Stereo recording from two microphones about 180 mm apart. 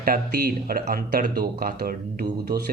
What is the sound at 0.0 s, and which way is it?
Speech, 55° right (ahead or behind).